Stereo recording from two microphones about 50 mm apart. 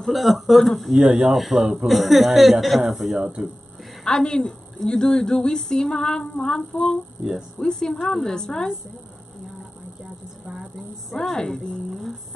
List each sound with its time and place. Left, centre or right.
0.0 s speech: centre
0.9 s speech: centre
1.3 s speech: centre
4.0 s a woman's voice: centre
10.4 s a sound: centre
11.1 s a woman's voice: centre
11.9 s a sound: centre